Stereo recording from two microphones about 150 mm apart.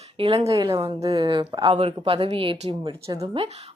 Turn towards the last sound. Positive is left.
turn(degrees=-45)  # may be behind; listen again after turning